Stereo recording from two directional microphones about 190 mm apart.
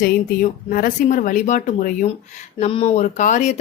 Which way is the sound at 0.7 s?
45° left (ahead or behind).